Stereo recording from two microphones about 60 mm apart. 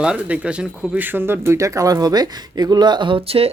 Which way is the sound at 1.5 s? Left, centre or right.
Right.